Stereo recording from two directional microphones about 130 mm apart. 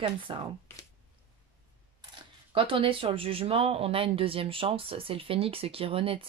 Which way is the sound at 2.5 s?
45° right (ahead or behind).